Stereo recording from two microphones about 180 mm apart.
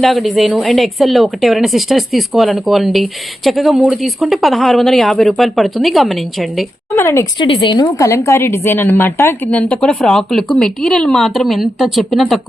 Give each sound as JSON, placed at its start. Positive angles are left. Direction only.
{"t": 0.0, "sound": "speech", "side_deg": 0}
{"t": 6.9, "sound": "a woman's voice", "side_deg": 15}
{"t": 7.3, "sound": "a woman's voice", "side_deg": 30}